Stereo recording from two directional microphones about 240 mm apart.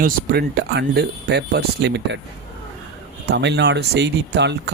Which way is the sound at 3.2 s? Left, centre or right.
Right.